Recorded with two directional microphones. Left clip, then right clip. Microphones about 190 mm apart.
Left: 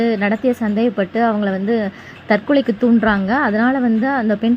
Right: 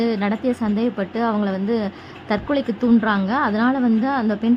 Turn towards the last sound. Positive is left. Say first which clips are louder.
# left 4 dB
turn(degrees=20)  # may be behind; listen again after turning